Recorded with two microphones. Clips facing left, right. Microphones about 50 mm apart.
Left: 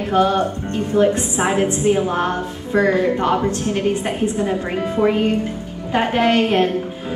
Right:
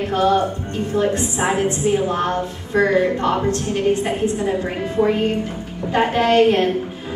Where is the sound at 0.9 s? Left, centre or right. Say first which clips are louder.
Left 4 dB; left.